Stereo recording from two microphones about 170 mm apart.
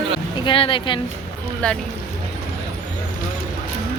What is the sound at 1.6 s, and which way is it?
Speech, 5° left (ahead or behind).